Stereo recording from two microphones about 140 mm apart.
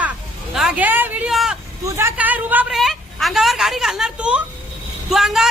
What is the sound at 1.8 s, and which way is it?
Speech, 20° right (ahead or behind).